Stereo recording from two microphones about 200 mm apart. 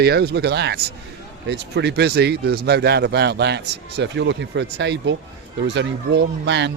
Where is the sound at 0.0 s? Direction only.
55° right (ahead or behind).